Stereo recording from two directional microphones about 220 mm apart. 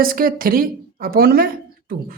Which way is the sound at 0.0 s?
40° right (ahead or behind).